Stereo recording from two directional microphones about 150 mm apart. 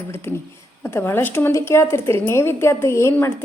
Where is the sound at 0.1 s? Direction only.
15° left (ahead or behind).